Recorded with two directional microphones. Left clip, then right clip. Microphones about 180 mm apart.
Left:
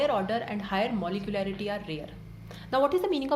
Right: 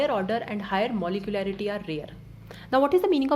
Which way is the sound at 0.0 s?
35° right (ahead or behind).